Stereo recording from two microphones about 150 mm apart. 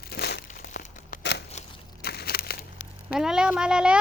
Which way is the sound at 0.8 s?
75° left (ahead or behind).